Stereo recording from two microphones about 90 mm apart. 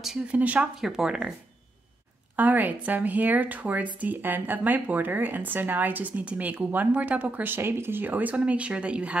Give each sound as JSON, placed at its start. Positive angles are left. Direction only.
{"t": 0.3, "sound": "speech", "side_deg": -15}
{"t": 2.3, "sound": "a woman's voice", "side_deg": -20}